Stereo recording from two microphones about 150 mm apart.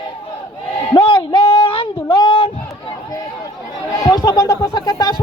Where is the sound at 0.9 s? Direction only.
35° left (ahead or behind).